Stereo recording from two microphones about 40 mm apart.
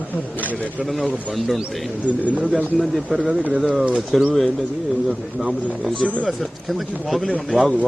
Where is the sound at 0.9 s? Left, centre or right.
Centre.